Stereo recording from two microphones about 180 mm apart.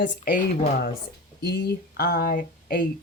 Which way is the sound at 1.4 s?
65° left (ahead or behind).